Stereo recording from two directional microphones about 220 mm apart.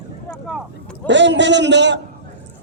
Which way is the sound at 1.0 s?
55° right (ahead or behind).